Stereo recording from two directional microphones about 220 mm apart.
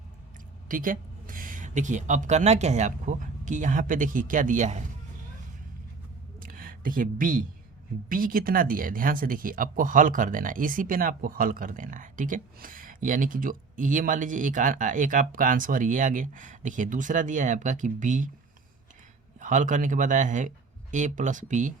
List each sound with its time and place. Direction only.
0.7 s speech: 40° right (ahead or behind)
6.4 s a sound: 40° right (ahead or behind)
8.1 s speech: 40° right (ahead or behind)
19.4 s speech: 35° right (ahead or behind)